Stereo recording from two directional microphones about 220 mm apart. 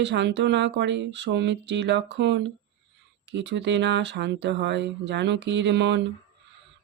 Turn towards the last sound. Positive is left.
turn(degrees=-55)  # may be behind; listen again after turning